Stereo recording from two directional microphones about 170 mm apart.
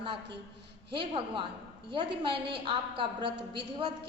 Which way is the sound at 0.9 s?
30° right (ahead or behind).